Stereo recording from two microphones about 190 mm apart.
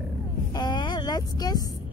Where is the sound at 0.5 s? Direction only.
25° left (ahead or behind).